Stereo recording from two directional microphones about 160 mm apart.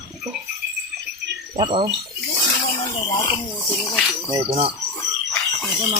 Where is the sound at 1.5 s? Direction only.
35° right (ahead or behind).